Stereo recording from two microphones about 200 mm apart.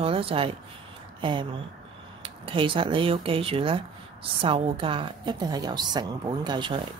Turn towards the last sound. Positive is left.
turn(degrees=-20)  # may be behind; listen again after turning